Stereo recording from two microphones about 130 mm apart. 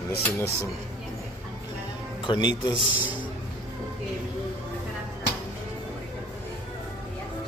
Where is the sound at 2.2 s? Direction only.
35° left (ahead or behind).